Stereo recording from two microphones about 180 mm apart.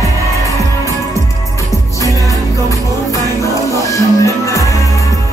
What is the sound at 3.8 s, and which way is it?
Music, 15° left (ahead or behind).